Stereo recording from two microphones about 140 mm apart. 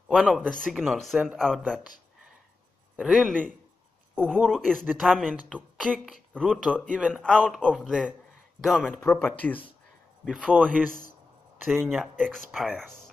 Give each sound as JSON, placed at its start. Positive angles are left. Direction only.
{"t": 0.1, "sound": "speech", "side_deg": -5}
{"t": 3.0, "sound": "speech", "side_deg": 0}
{"t": 4.1, "sound": "a sound", "side_deg": 10}
{"t": 4.4, "sound": "speech", "side_deg": 0}
{"t": 9.0, "sound": "speech", "side_deg": 15}
{"t": 10.2, "sound": "speech", "side_deg": -5}
{"t": 11.9, "sound": "speech", "side_deg": 0}